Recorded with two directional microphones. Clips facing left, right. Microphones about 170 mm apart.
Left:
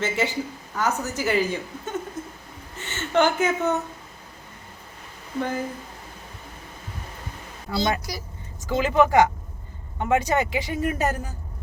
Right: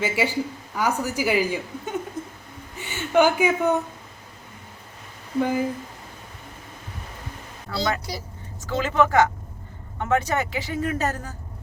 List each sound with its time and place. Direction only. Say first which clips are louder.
0.0 s a woman's voice: right 1 dB; 10° right (ahead or behind)
5.4 s a woman's voice: right 4 dB; 10° right (ahead or behind)
7.8 s a woman's voice: left 1 dB; 30° right (ahead or behind)
8.7 s speech: left 2 dB; 15° left (ahead or behind)